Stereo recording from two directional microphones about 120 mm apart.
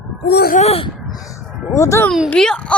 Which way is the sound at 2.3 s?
10° left (ahead or behind).